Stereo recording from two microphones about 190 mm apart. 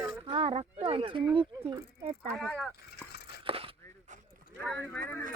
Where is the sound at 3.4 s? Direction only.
30° right (ahead or behind).